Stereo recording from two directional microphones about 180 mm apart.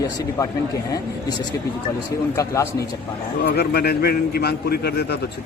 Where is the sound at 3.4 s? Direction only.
65° left (ahead or behind).